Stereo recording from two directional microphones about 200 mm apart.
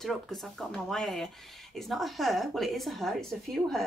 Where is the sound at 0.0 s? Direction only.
Centre (ahead or behind).